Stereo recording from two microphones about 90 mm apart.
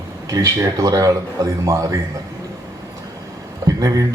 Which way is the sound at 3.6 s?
40° right (ahead or behind).